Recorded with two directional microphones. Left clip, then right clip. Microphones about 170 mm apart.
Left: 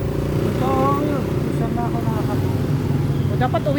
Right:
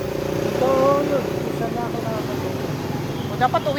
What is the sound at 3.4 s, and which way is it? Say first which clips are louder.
Speech: right 3 dB; 25° left (ahead or behind).